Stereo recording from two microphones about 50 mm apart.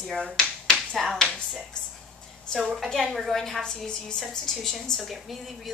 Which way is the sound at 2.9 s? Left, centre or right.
Centre.